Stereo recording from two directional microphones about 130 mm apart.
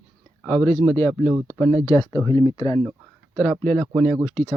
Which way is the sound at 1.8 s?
25° left (ahead or behind).